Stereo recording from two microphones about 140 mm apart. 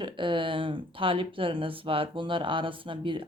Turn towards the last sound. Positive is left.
turn(degrees=-35)  # may be behind; listen again after turning